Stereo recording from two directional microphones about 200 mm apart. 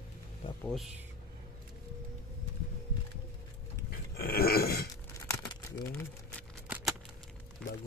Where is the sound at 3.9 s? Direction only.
50° left (ahead or behind).